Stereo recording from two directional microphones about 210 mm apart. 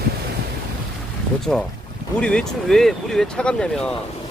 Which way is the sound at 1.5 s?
5° left (ahead or behind).